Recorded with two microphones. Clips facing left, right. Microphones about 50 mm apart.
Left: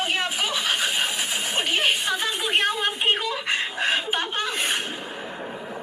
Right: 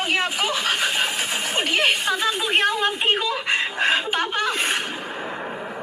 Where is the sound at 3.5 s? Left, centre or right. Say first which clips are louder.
Right 3 dB; right.